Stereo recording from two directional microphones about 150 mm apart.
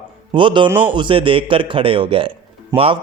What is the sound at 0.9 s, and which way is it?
Speech, 35° right (ahead or behind).